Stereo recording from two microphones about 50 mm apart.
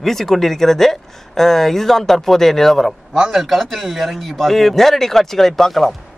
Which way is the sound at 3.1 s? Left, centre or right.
Centre.